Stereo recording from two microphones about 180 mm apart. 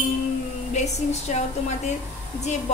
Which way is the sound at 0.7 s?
40° left (ahead or behind).